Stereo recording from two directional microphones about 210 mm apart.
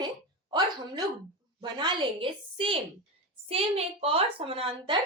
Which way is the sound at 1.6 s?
20° right (ahead or behind).